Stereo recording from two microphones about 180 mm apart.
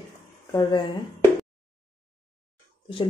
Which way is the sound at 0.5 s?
25° left (ahead or behind).